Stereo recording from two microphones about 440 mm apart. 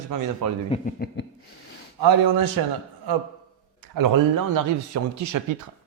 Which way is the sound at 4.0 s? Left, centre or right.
Right.